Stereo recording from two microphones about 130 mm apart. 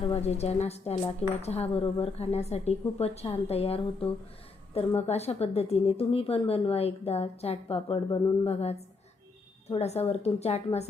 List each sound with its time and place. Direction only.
0.1 s speech: 55° left (ahead or behind)